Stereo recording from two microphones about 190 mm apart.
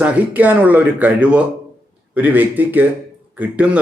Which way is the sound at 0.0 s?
10° right (ahead or behind).